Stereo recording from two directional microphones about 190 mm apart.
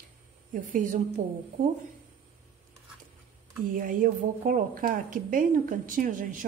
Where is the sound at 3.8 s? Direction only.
45° right (ahead or behind).